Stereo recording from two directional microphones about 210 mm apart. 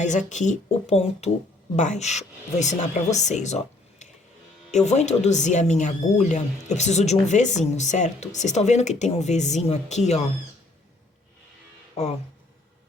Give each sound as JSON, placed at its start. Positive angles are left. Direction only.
{"t": 0.0, "sound": "speech", "side_deg": 35}